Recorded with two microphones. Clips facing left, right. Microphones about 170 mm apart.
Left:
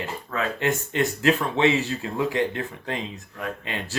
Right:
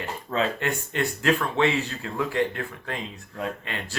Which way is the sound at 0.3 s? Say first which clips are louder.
Right 3 dB; 25° right (ahead or behind).